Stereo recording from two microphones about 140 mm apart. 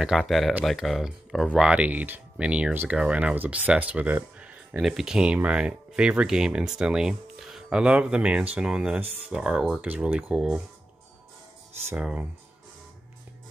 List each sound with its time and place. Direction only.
0.0 s speech: centre (ahead or behind)
11.9 s speech: 10° right (ahead or behind)